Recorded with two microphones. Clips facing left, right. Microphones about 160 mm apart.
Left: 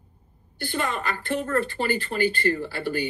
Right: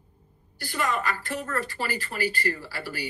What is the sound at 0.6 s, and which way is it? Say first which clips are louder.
Speech: even; 25° left (ahead or behind).